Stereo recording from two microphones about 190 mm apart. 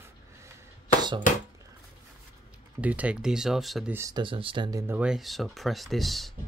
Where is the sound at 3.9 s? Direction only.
20° right (ahead or behind).